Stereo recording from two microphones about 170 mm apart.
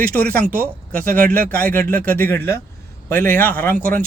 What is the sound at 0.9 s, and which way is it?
Speech, 55° right (ahead or behind).